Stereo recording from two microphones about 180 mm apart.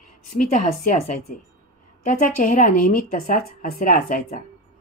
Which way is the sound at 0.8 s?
45° left (ahead or behind).